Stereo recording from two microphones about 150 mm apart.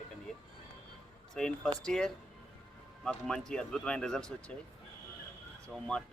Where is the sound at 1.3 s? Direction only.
5° left (ahead or behind).